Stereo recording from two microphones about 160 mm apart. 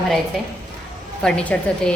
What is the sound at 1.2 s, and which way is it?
Speech, 5° left (ahead or behind).